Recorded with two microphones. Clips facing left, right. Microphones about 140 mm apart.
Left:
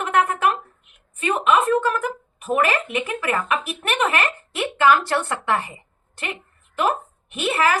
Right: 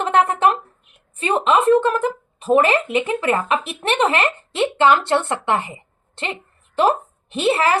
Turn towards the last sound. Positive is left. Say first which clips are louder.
# right 3 dB
turn(degrees=-30)  # may be behind; listen again after turning